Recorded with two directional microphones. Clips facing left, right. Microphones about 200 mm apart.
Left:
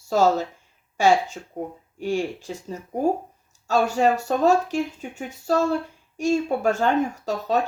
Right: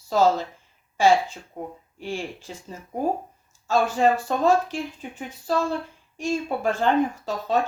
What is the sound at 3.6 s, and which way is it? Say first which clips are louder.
Speech: left 1 dB; 40° left (ahead or behind).